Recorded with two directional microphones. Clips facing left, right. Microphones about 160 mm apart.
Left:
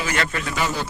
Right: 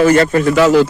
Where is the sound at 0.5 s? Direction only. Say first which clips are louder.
Right 17 dB; 90° right.